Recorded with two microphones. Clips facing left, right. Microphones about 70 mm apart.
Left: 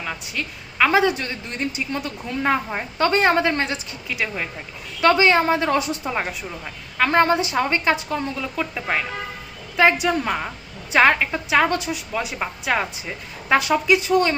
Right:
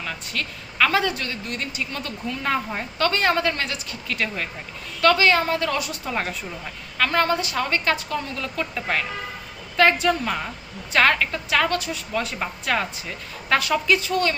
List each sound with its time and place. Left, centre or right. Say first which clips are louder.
0.0 s a woman's voice: left 1 dB; centre
4.1 s a woman's voice: left 1 dB; centre
4.9 s a woman's voice: left 2 dB; left
7.0 s a woman's voice: left 4 dB; left
12.1 s a woman's voice: right 1 dB; centre